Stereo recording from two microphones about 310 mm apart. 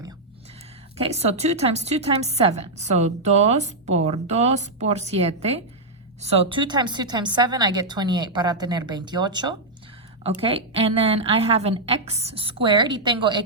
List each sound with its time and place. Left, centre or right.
1.1 s a woman's voice: right